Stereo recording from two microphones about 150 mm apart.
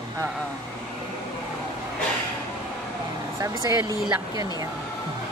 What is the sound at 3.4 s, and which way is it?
Speech, 20° right (ahead or behind).